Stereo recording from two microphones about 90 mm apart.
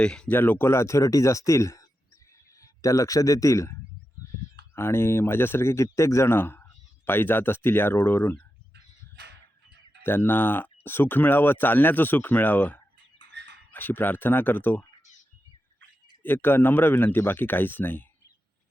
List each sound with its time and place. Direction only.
0.0 s speech: 10° left (ahead or behind)
0.3 s speech: 20° left (ahead or behind)
10.0 s speech: 25° left (ahead or behind)
16.2 s speech: 20° left (ahead or behind)